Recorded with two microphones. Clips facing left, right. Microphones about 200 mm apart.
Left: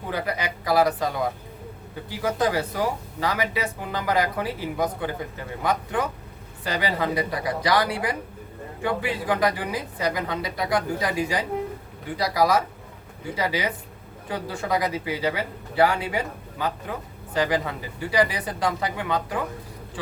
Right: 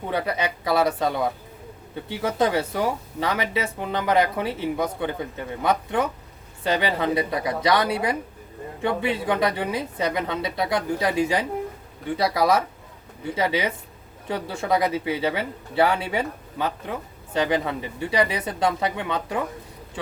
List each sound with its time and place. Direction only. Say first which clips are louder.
0.1 s speech: right 2 dB; 25° right (ahead or behind)
2.0 s speech: right 1 dB; 25° right (ahead or behind)